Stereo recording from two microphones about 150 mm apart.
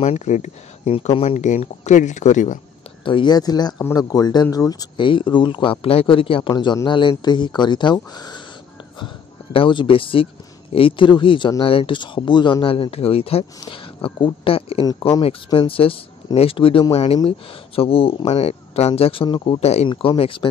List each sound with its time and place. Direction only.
0.0 s speech: 50° left (ahead or behind)
0.9 s speech: 40° left (ahead or behind)
3.1 s speech: 30° left (ahead or behind)
19.9 s speech: 35° left (ahead or behind)